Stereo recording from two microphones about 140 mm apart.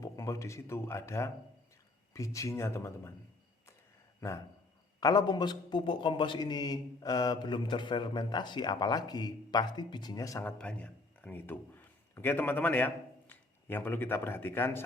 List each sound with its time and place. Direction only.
0.0 s speech: 25° left (ahead or behind)
4.2 s a man's voice: 20° left (ahead or behind)
10.6 s a man's voice: 10° left (ahead or behind)